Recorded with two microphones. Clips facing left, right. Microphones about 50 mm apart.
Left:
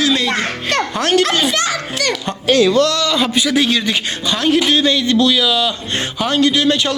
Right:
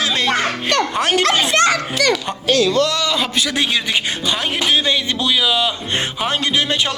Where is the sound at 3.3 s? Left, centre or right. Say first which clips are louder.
Left 4 dB; centre.